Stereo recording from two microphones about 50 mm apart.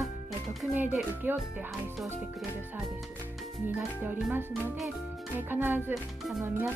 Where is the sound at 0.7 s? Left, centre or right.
Right.